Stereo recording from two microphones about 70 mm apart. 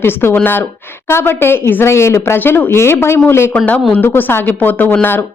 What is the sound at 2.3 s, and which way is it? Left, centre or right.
Speech, left.